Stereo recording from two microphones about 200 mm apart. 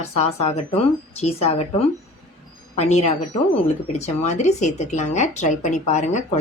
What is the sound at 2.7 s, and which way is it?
Speech, 30° left (ahead or behind).